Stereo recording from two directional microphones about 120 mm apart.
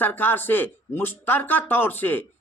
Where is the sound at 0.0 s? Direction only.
15° left (ahead or behind).